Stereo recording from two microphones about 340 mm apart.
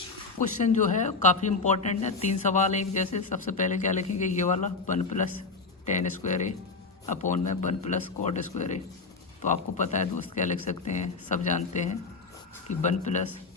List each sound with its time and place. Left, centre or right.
0.6 s a woman's voice: left